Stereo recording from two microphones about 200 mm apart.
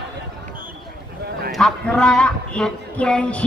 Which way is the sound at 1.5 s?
Centre (ahead or behind).